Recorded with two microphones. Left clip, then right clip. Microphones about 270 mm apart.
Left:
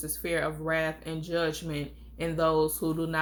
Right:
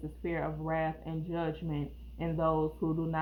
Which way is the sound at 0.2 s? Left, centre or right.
Left.